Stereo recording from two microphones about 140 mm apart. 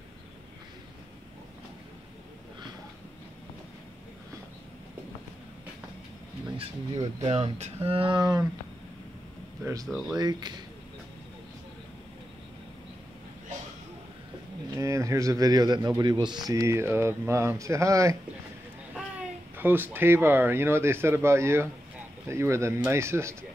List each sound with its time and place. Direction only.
6.4 s speech: 30° right (ahead or behind)
7.2 s speech: 45° right (ahead or behind); by 8.5 s 30° right (ahead or behind)
9.8 s speech: centre (ahead or behind)
10.1 s speech: 30° right (ahead or behind)
14.8 s speech: 20° right (ahead or behind)
18.9 s speech: 10° right (ahead or behind)